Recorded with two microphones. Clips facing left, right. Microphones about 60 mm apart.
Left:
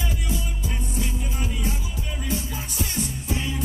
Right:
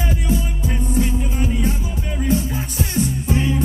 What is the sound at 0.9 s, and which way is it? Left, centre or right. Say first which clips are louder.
Music: right 11 dB; right.